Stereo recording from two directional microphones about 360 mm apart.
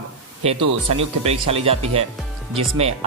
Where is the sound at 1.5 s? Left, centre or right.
Centre.